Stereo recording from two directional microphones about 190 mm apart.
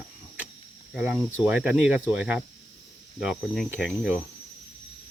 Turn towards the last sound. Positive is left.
turn(degrees=-5)  # may be behind; listen again after turning